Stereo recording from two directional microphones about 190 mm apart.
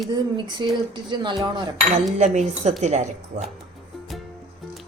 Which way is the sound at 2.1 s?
35° right (ahead or behind).